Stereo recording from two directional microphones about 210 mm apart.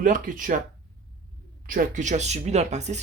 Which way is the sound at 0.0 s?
40° right (ahead or behind).